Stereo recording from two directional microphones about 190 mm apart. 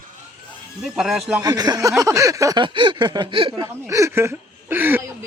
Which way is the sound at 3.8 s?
15° right (ahead or behind).